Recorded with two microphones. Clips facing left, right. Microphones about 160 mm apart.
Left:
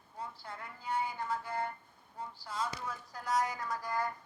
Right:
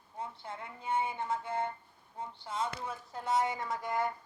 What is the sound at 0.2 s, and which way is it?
A woman's voice, 25° right (ahead or behind).